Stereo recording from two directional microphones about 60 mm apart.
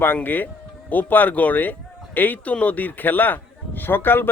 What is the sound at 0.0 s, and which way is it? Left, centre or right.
Speech, left.